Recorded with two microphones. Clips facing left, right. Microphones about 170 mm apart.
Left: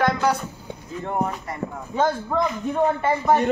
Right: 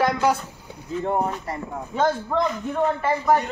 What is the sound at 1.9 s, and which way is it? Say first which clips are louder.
Speech: even; 10° left (ahead or behind).